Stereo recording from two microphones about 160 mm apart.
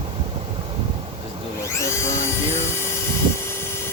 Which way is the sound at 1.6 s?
15° left (ahead or behind).